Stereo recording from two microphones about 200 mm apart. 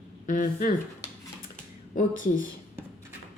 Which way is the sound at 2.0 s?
40° left (ahead or behind).